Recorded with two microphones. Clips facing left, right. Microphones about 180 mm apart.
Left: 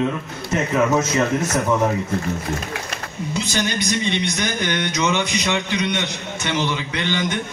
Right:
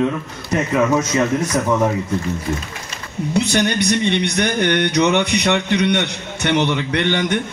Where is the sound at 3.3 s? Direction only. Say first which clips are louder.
Right 6 dB; 65° right (ahead or behind).